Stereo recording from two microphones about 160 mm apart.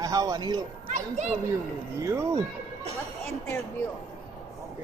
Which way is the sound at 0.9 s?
45° right (ahead or behind).